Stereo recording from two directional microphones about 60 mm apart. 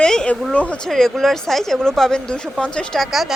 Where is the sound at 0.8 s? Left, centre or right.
Centre.